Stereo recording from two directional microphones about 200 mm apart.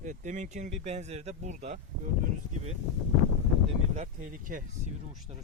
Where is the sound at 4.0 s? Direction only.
40° right (ahead or behind).